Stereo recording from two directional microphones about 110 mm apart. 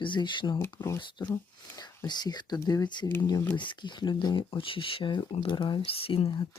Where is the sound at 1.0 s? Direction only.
40° left (ahead or behind).